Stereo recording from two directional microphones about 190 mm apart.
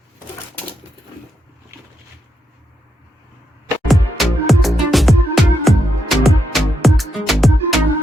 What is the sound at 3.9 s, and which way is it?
Music, centre (ahead or behind).